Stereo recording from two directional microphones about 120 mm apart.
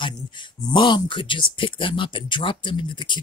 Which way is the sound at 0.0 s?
40° left (ahead or behind).